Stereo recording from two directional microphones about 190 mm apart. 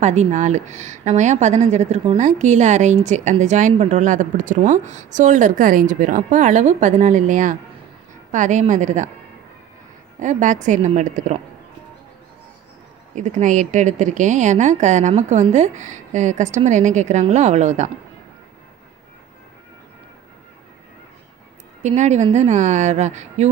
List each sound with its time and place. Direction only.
0.0 s a woman's voice: 35° right (ahead or behind)
10.2 s a woman's voice: 40° right (ahead or behind)
13.1 s a woman's voice: 40° right (ahead or behind)
21.8 s a woman's voice: 40° right (ahead or behind)